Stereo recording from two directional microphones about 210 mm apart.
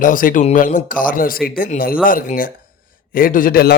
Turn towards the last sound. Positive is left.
turn(degrees=45)  # may be behind; listen again after turning